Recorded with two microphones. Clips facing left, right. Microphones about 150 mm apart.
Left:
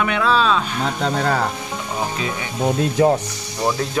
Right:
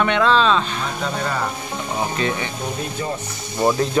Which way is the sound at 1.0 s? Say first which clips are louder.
Left 5 dB; 70° left (ahead or behind).